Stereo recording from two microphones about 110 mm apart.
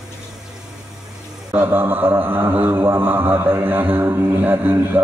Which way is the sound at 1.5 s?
20° right (ahead or behind).